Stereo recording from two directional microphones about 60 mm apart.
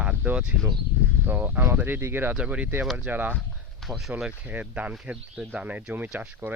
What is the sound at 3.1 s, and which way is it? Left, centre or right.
Speech, right.